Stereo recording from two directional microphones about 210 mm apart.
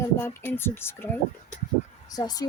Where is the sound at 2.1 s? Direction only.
20° left (ahead or behind).